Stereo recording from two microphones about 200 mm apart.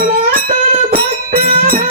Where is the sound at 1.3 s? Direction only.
45° right (ahead or behind).